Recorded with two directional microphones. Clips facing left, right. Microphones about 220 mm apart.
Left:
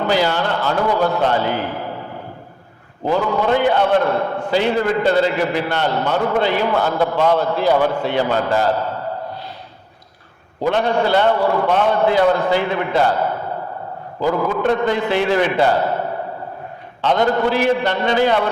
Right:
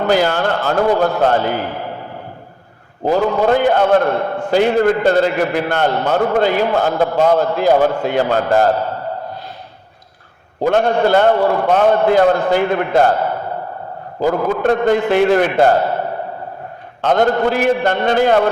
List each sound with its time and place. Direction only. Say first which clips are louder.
0.1 s a man's voice: right 3 dB; 50° right (ahead or behind)
3.1 s a man's voice: right 3 dB; 45° right (ahead or behind)
10.6 s a man's voice: right 3 dB; 45° right (ahead or behind)
14.2 s a man's voice: right 2 dB; 45° right (ahead or behind)
17.0 s a man's voice: right 2 dB; 50° right (ahead or behind)